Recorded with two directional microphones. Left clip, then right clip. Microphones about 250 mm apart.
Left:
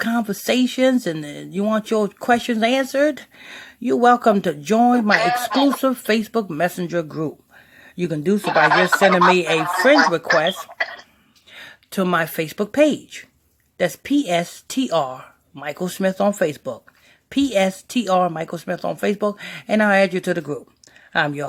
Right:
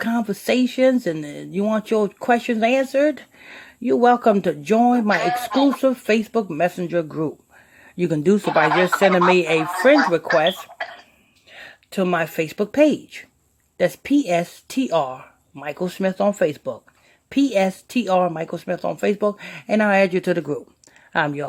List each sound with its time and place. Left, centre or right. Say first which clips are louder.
0.0 s speech: left 1 dB; centre
5.1 s speech: left 2 dB; left
5.8 s speech: right 1 dB; centre
8.4 s speech: left 4 dB; left
9.3 s speech: even; centre
9.6 s speech: left 2 dB; left
10.8 s throat clearing: left 6 dB; left
11.5 s speech: even; centre